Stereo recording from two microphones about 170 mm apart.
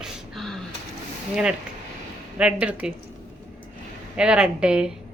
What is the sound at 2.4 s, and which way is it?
Speech, 5° right (ahead or behind).